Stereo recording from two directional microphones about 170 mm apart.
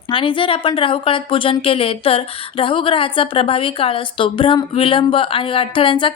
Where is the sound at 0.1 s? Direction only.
30° left (ahead or behind).